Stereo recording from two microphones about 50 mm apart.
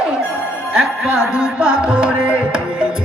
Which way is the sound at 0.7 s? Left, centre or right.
Centre.